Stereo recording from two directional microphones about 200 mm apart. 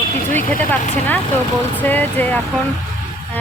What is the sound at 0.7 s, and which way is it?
Speech, 10° left (ahead or behind).